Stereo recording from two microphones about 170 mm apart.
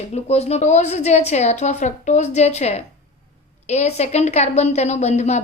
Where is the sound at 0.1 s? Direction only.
40° left (ahead or behind).